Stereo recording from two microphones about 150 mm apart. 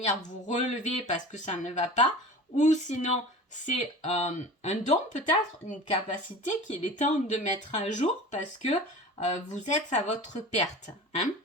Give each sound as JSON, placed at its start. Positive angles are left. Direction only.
{"t": 0.4, "sound": "speech", "side_deg": 50}